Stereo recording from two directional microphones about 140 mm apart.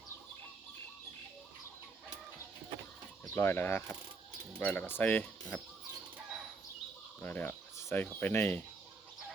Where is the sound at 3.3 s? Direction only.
15° left (ahead or behind).